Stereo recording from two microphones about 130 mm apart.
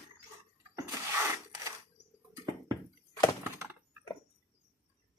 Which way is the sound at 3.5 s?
15° right (ahead or behind).